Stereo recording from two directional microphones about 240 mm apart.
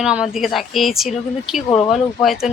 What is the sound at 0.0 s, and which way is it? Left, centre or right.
Speech, centre.